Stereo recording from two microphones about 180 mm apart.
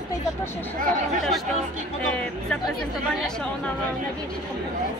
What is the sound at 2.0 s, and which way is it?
Speech, 5° left (ahead or behind).